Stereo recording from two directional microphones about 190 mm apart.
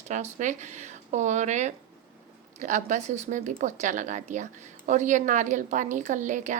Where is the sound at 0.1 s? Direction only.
40° right (ahead or behind).